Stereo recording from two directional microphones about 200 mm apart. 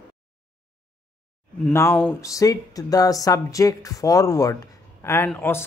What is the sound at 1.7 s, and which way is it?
Speech, 15° left (ahead or behind).